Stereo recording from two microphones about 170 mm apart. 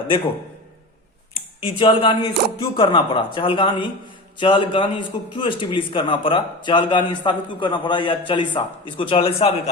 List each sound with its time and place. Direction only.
1.6 s a man's voice: 30° left (ahead or behind)